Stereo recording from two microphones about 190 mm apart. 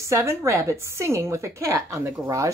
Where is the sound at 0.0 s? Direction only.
15° right (ahead or behind).